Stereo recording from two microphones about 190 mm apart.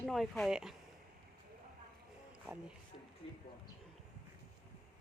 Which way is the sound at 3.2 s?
30° left (ahead or behind).